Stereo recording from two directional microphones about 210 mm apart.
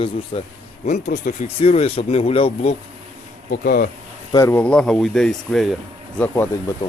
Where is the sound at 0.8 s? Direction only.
35° left (ahead or behind).